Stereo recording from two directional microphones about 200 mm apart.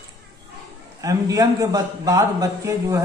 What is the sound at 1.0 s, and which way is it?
A man's voice, 15° right (ahead or behind).